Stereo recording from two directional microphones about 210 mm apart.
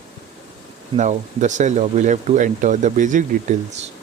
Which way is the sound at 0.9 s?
35° right (ahead or behind).